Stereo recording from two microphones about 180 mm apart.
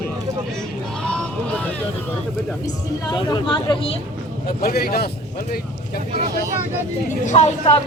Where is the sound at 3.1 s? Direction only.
25° left (ahead or behind).